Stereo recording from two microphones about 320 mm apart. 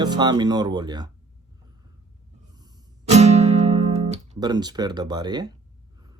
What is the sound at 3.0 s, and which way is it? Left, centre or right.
Music, right.